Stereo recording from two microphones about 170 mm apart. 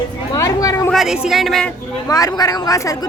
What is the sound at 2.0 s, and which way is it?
Speech, 20° left (ahead or behind).